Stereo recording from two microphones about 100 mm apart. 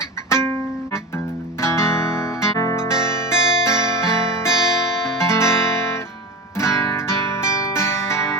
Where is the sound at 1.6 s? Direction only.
30° left (ahead or behind).